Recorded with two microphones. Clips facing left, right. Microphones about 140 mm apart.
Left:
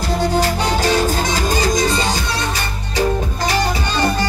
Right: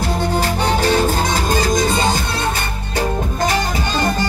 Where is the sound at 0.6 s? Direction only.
55° right (ahead or behind).